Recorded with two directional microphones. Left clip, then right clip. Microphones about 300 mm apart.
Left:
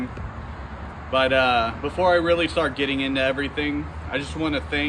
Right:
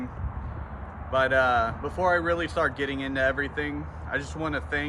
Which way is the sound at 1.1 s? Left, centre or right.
Centre.